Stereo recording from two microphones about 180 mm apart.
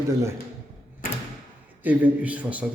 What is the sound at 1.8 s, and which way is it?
Speech, 10° right (ahead or behind).